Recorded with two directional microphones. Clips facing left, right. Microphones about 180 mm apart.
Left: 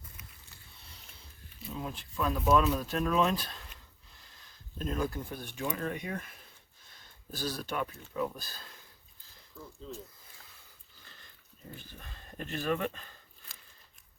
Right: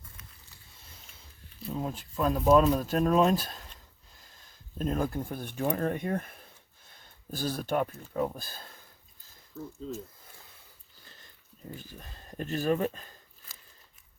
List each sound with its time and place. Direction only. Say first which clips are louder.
1.7 s speech: right 5 dB; 40° right (ahead or behind)
4.8 s speech: right 4 dB; 50° right (ahead or behind)
11.8 s speech: right 3 dB; 40° right (ahead or behind)